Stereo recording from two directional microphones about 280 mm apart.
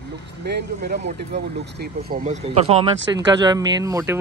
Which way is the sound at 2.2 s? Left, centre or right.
Right.